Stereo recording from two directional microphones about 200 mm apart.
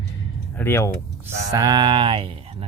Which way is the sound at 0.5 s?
10° left (ahead or behind).